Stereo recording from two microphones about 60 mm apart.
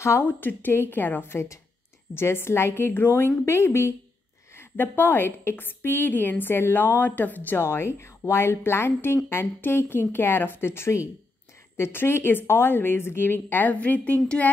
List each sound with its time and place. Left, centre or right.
0.2 s a woman's voice: left
4.6 s a woman's voice: left
7.5 s a woman's voice: left